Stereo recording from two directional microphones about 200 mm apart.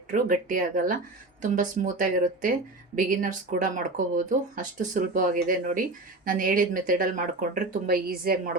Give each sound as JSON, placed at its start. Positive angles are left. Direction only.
{"t": 0.1, "sound": "speech", "side_deg": -40}